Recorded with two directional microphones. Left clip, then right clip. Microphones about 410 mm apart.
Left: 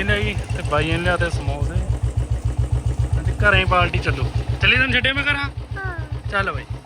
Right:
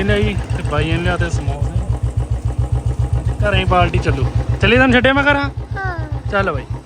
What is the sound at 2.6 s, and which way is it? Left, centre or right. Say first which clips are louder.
Vehicle: right 4 dB; centre.